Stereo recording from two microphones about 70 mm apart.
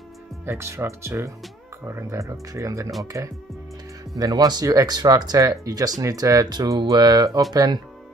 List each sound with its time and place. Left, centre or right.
0.5 s speech: right
6.5 s speech: right
7.5 s speech: right